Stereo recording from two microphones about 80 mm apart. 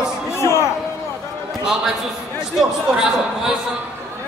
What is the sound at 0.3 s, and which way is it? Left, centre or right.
Music, left.